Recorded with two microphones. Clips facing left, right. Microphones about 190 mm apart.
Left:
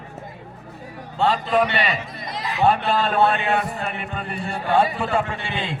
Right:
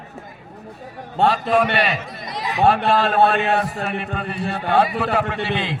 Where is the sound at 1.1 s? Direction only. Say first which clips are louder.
Right 2 dB; 55° right (ahead or behind).